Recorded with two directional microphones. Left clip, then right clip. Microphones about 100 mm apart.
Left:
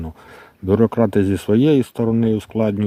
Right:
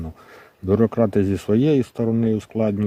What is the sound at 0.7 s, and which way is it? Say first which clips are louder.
Speech: left 2 dB; 35° left (ahead or behind).